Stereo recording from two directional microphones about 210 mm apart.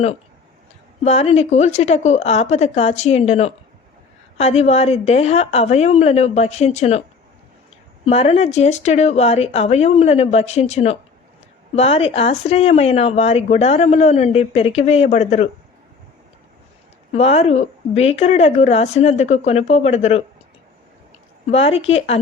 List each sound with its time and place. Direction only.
1.0 s speech: 30° left (ahead or behind)
8.0 s speech: 30° left (ahead or behind)
17.1 s speech: 30° left (ahead or behind)
21.5 s speech: 30° left (ahead or behind)